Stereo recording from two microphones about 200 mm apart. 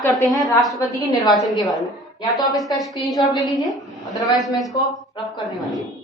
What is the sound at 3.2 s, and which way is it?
Speech, 20° left (ahead or behind).